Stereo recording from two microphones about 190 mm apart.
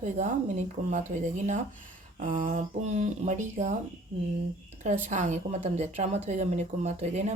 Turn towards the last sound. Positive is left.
turn(degrees=-40)  # may be behind; listen again after turning